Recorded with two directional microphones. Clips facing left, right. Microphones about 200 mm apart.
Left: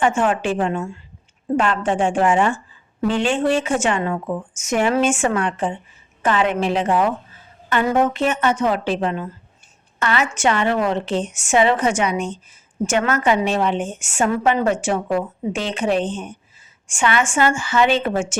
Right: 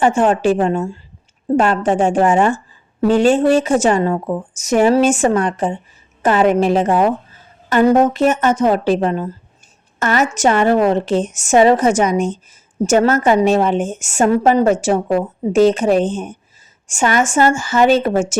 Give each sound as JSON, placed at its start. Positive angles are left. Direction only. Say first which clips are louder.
{"t": 0.0, "sound": "a woman's voice", "louder": "right 5 dB", "side_deg": -35}